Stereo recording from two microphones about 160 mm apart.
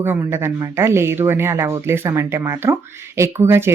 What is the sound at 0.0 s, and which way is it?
Speech, 15° right (ahead or behind).